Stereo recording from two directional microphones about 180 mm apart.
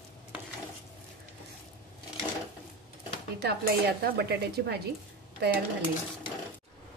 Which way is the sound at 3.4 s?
60° right (ahead or behind).